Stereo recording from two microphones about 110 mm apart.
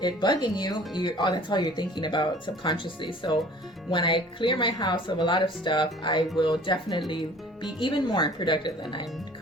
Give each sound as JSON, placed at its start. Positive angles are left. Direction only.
{"t": 0.0, "sound": "speech", "side_deg": 40}